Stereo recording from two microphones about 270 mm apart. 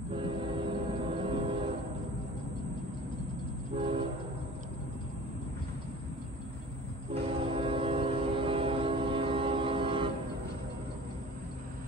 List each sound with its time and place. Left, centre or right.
0.1 s train: centre
3.7 s train: centre
7.4 s train: right